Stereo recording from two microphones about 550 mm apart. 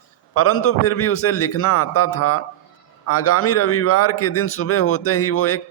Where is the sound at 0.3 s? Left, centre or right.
Left.